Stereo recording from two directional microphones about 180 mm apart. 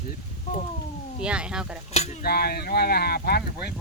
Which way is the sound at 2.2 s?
60° left (ahead or behind).